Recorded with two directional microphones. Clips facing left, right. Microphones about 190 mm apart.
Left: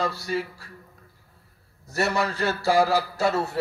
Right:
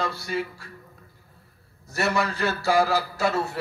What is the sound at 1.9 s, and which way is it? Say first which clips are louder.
A man's voice: even; 40° left (ahead or behind).